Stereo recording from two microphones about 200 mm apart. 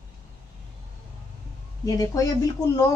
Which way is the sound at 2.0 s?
15° left (ahead or behind).